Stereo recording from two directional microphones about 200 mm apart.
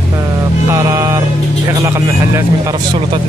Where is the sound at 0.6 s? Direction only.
15° right (ahead or behind).